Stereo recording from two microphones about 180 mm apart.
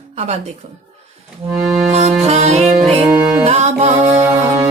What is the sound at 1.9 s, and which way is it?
Music, 35° right (ahead or behind).